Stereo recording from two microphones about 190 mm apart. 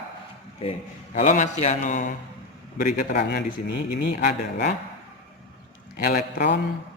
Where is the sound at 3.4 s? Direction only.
45° left (ahead or behind).